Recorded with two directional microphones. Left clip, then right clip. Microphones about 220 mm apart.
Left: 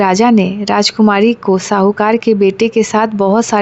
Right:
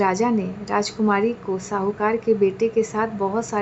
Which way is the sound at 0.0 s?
40° left (ahead or behind).